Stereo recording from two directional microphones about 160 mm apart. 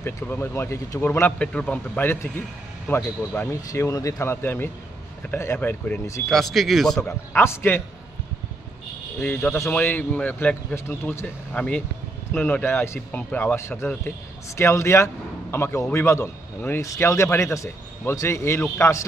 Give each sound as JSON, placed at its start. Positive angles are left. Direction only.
{"t": 0.0, "sound": "speech", "side_deg": 15}
{"t": 6.2, "sound": "speech", "side_deg": 0}
{"t": 7.3, "sound": "speech", "side_deg": 15}
{"t": 9.2, "sound": "speech", "side_deg": 10}